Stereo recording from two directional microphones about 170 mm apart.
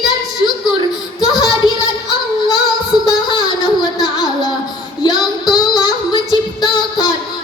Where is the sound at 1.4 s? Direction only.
25° left (ahead or behind).